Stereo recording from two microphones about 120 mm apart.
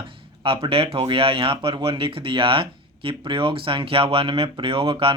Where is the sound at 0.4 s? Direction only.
50° right (ahead or behind).